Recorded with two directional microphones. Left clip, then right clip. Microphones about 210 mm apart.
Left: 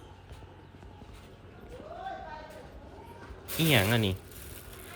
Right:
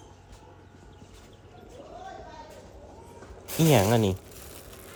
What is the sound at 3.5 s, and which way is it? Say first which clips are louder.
Speech: right 4 dB; 20° right (ahead or behind).